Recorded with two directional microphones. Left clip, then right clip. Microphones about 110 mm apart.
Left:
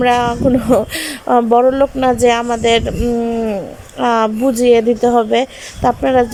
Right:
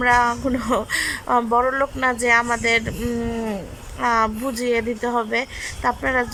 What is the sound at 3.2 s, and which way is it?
Speech, 5° left (ahead or behind).